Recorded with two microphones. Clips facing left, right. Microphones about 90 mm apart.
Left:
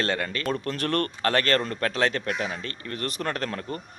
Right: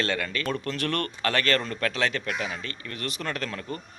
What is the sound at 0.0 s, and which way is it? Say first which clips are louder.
Speech: left 1 dB; 35° left (ahead or behind).